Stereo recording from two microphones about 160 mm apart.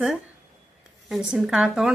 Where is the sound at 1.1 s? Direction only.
5° right (ahead or behind).